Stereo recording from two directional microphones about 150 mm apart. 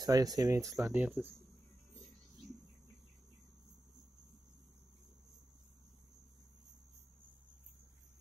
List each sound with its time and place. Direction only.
0.0 s speech: 25° right (ahead or behind)
0.8 s speech: 10° right (ahead or behind)